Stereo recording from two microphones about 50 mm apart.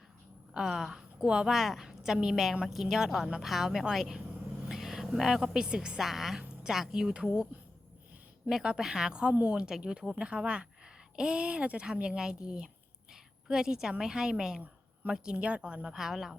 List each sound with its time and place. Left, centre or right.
0.5 s a woman's voice: centre
1.5 s a woman's voice: centre
6.0 s a woman's voice: centre
8.4 s a woman's voice: centre
15.9 s speech: centre